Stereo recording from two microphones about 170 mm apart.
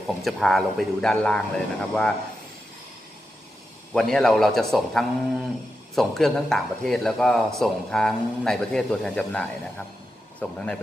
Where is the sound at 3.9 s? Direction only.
5° left (ahead or behind).